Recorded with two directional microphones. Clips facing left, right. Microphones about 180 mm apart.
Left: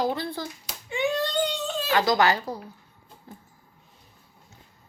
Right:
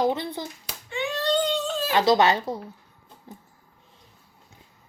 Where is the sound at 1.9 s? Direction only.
25° right (ahead or behind).